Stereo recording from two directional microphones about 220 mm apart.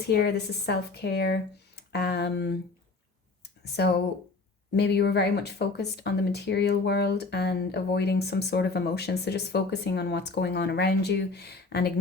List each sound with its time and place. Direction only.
0.1 s speech: 50° left (ahead or behind)
3.6 s speech: 50° left (ahead or behind)